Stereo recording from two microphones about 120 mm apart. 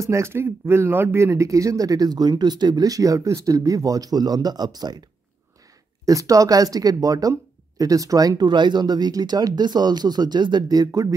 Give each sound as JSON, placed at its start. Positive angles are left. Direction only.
{"t": 0.0, "sound": "speech", "side_deg": -25}
{"t": 6.0, "sound": "speech", "side_deg": -30}